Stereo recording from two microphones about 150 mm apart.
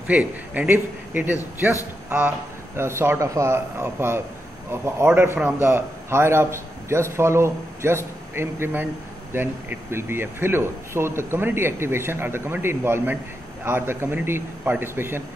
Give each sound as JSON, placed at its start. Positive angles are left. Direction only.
{"t": 0.7, "sound": "speech", "side_deg": -15}